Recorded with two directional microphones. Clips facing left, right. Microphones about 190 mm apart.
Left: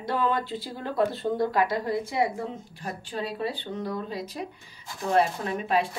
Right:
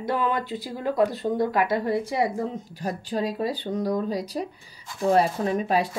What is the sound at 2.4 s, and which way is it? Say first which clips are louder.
Speech: right 5 dB; 40° right (ahead or behind).